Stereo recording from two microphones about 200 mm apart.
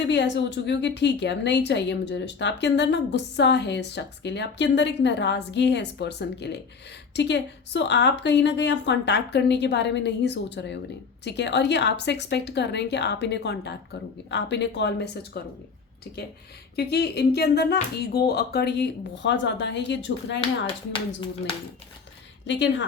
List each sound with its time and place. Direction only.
0.1 s a woman's voice: 60° left (ahead or behind)
16.7 s a woman's voice: 55° left (ahead or behind)
22.4 s a woman's voice: 65° left (ahead or behind)